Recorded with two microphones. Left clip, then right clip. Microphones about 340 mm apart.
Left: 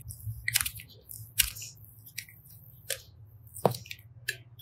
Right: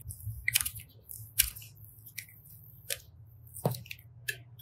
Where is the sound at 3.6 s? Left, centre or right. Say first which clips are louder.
Left 7 dB; centre.